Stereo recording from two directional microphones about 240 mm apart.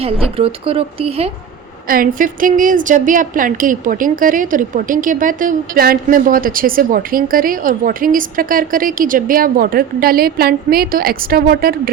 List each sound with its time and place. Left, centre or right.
0.0 s speech: right
1.9 s a woman's voice: right